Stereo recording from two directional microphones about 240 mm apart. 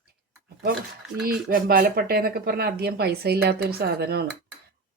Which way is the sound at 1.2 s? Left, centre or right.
Right.